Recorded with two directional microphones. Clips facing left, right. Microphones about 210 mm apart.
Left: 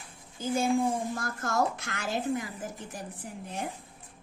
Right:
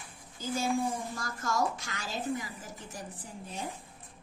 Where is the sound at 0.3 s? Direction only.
55° left (ahead or behind).